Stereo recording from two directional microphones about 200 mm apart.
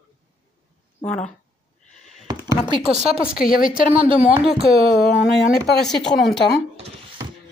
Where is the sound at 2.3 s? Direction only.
20° right (ahead or behind).